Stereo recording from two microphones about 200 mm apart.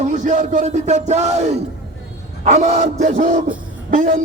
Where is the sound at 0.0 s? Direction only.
40° right (ahead or behind).